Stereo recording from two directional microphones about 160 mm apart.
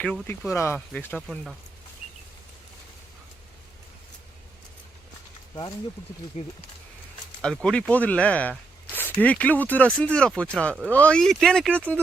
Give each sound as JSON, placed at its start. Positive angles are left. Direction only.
{"t": 0.0, "sound": "speech", "side_deg": 10}
{"t": 6.3, "sound": "speech", "side_deg": 45}
{"t": 7.4, "sound": "speech", "side_deg": 5}